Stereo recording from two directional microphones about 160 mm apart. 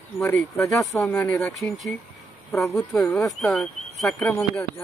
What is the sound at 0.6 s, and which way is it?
Speech, 20° left (ahead or behind).